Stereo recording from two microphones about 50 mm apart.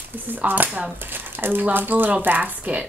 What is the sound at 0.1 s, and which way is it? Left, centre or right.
A woman's voice, right.